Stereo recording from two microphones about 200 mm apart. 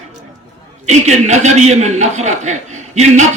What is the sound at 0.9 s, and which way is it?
A man's voice, 35° right (ahead or behind).